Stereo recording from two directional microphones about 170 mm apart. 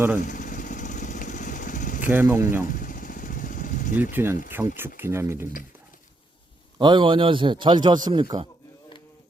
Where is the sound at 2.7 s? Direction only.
55° left (ahead or behind).